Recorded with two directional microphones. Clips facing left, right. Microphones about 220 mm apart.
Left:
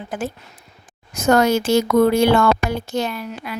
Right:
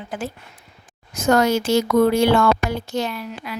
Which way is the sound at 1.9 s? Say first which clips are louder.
Left 1 dB; 50° left (ahead or behind).